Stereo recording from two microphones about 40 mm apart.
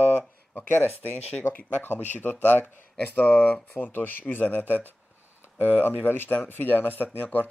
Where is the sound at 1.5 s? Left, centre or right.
Left.